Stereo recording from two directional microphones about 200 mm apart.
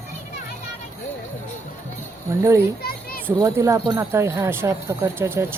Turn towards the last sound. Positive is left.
turn(degrees=-10)  # may be behind; listen again after turning